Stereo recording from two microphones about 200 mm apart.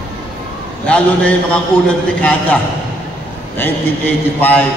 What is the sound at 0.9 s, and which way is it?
A man's voice, 5° left (ahead or behind).